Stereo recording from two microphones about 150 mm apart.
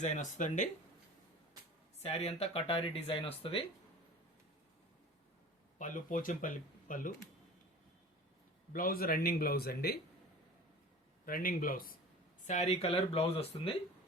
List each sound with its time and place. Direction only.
0.0 s speech: 55° left (ahead or behind)
2.0 s speech: 45° left (ahead or behind)
5.8 s speech: 60° left (ahead or behind)
8.7 s speech: 75° left (ahead or behind)
11.3 s speech: 70° left (ahead or behind)
12.5 s speech: 50° left (ahead or behind)